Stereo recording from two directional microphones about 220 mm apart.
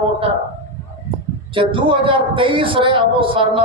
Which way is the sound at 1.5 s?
25° right (ahead or behind).